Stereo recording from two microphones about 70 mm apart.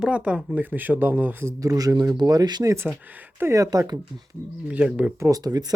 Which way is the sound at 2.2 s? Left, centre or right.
Right.